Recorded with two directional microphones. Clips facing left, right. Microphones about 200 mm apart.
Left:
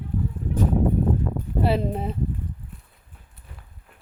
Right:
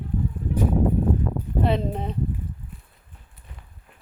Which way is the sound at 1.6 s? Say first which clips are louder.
Left 1 dB; 5° left (ahead or behind).